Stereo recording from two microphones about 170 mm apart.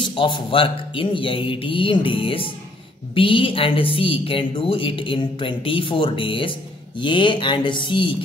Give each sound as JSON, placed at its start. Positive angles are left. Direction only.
{"t": 0.0, "sound": "a woman's voice", "side_deg": 30}